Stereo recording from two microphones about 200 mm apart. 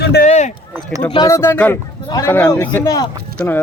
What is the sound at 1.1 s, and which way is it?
A man's voice, 15° left (ahead or behind).